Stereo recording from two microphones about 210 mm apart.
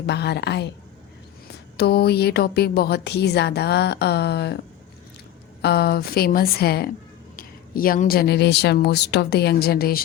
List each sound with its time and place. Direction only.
0.0 s a woman's voice: 50° left (ahead or behind)
1.7 s a woman's voice: 50° left (ahead or behind)
5.6 s a woman's voice: 50° left (ahead or behind)